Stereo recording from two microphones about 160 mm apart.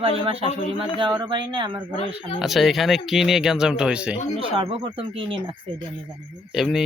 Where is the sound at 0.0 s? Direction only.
35° right (ahead or behind).